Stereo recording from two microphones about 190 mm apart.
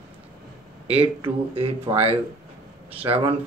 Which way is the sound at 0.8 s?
30° right (ahead or behind).